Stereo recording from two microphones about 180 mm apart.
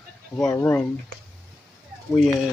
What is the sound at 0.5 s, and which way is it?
Speech, 15° left (ahead or behind).